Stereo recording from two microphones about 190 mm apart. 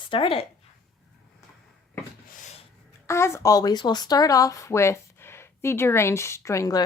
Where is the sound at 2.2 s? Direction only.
40° left (ahead or behind).